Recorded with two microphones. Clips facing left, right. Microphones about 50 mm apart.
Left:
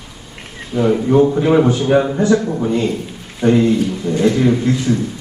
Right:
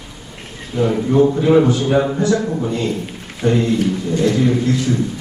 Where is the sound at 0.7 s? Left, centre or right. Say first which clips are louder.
Left 1 dB; centre.